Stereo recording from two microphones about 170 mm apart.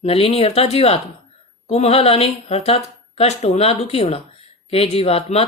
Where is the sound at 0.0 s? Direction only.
35° left (ahead or behind).